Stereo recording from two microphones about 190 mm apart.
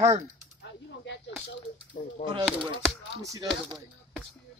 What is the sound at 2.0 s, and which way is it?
Speech, 45° left (ahead or behind).